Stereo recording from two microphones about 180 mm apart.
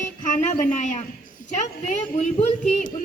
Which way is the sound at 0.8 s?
40° left (ahead or behind).